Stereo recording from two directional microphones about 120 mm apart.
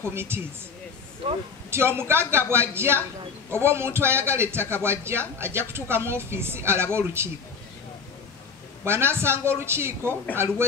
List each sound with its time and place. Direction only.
0.1 s a woman's voice: 20° right (ahead or behind)
1.2 s speech: 45° right (ahead or behind)
1.7 s a woman's voice: 20° right (ahead or behind)
8.8 s a woman's voice: 20° right (ahead or behind)